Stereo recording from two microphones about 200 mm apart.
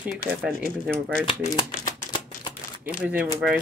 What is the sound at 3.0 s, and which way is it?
Speech, 10° right (ahead or behind).